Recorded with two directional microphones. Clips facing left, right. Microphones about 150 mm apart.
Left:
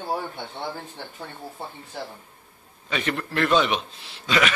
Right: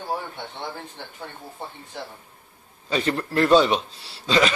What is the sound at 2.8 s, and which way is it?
A man's voice, 35° right (ahead or behind).